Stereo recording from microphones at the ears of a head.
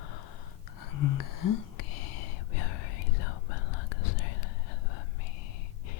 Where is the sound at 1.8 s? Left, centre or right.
Left.